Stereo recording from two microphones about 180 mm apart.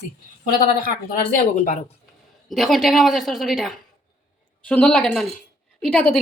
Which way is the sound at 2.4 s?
Centre (ahead or behind).